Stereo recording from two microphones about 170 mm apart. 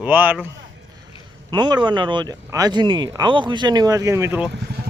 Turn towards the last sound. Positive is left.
turn(degrees=-10)  # may be behind; listen again after turning